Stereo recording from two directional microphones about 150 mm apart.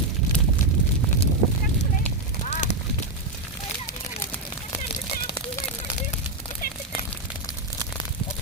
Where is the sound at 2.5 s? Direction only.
50° left (ahead or behind).